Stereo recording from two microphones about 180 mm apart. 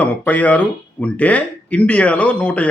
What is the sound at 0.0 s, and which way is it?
Speech, 10° left (ahead or behind).